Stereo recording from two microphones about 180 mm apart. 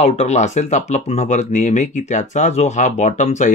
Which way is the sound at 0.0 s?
35° left (ahead or behind).